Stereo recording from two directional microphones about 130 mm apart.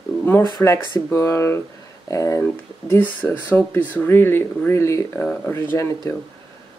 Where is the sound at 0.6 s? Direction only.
15° left (ahead or behind).